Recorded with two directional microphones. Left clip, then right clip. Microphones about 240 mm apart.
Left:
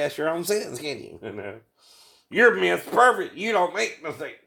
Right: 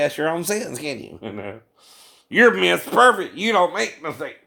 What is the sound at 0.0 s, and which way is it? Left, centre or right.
Speech, right.